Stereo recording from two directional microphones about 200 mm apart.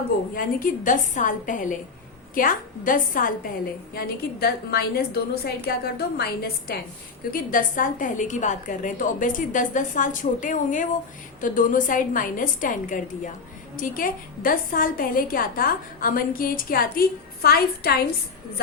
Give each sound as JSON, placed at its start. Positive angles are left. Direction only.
{"t": 0.3, "sound": "a woman's voice", "side_deg": 45}
{"t": 7.5, "sound": "a woman's voice", "side_deg": 40}